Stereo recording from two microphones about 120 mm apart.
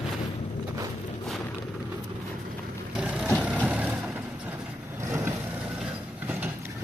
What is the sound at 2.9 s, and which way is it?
Vehicle, 5° right (ahead or behind).